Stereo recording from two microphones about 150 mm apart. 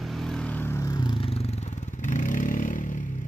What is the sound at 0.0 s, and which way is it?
Vehicle, centre (ahead or behind).